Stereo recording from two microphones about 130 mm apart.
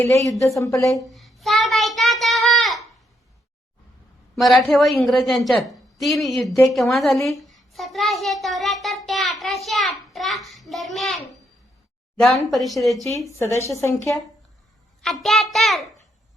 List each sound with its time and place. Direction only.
0.0 s a woman's voice: 20° left (ahead or behind)
1.1 s child singing: centre (ahead or behind)
4.4 s a woman's voice: centre (ahead or behind)
13.4 s a woman's voice: 20° left (ahead or behind)
15.0 s a woman's voice: centre (ahead or behind)